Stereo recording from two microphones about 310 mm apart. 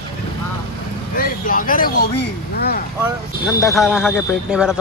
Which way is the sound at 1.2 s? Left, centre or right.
Left.